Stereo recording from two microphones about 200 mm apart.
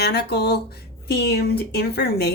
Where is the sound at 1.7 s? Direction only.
55° left (ahead or behind).